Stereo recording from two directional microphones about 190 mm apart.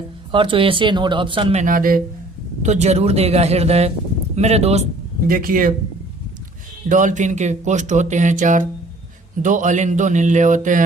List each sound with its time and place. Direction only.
0.3 s speech: 25° right (ahead or behind)
1.6 s speech: 50° right (ahead or behind)
2.6 s speech: 35° right (ahead or behind)
5.3 s speech: 45° right (ahead or behind)
6.8 s speech: 40° right (ahead or behind)